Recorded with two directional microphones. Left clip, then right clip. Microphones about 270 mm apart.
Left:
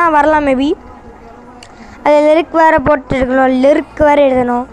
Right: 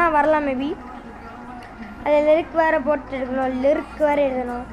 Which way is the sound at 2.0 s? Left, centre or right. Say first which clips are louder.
Left 8 dB; left.